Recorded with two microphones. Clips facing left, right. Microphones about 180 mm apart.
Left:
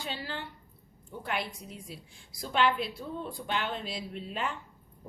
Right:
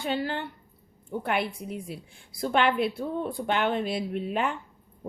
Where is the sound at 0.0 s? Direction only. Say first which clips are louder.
Right 9 dB; 55° right (ahead or behind).